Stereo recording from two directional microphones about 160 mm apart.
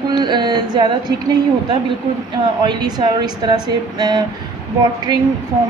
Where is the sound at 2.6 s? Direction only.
25° right (ahead or behind).